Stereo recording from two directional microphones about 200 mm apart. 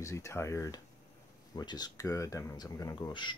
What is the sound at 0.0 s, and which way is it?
Speech, 15° left (ahead or behind).